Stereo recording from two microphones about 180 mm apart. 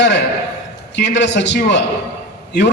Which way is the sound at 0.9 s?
75° left (ahead or behind).